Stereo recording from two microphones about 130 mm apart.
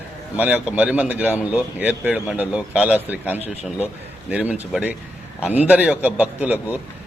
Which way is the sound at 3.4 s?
55° left (ahead or behind).